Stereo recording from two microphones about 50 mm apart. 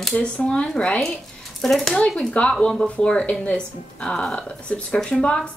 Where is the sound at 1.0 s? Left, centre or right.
Centre.